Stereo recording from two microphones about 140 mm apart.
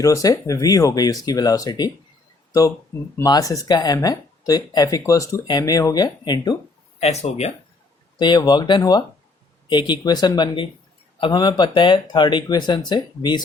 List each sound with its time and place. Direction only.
0.0 s speech: 25° left (ahead or behind)
7.0 s speech: 50° left (ahead or behind)
8.2 s speech: 30° left (ahead or behind)